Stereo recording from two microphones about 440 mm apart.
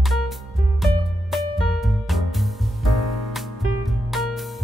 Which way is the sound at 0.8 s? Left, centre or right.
Centre.